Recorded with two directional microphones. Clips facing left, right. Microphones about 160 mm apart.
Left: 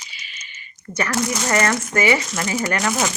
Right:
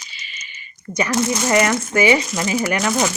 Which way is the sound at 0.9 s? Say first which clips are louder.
Right 3 dB; 20° right (ahead or behind).